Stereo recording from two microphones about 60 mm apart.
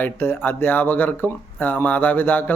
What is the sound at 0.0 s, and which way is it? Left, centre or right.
Speech, left.